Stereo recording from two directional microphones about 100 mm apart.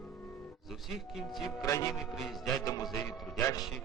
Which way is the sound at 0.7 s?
5° right (ahead or behind).